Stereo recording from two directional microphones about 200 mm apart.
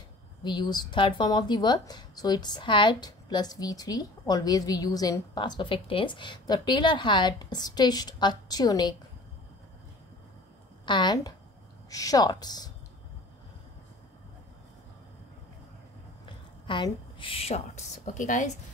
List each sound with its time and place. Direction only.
0.4 s speech: 20° left (ahead or behind)
10.9 s speech: 20° left (ahead or behind)
16.3 s a woman's voice: 25° left (ahead or behind)